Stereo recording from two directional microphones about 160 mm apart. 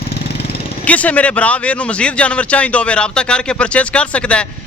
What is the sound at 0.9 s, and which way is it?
Speech, 10° left (ahead or behind).